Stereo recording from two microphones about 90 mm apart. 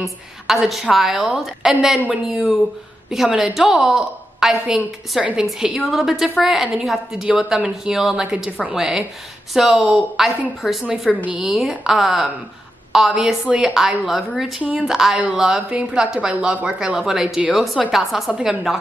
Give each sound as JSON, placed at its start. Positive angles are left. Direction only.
{"t": 0.0, "sound": "a woman's voice", "side_deg": 0}
{"t": 14.6, "sound": "speech", "side_deg": -15}
{"t": 14.9, "sound": "a woman's voice", "side_deg": -5}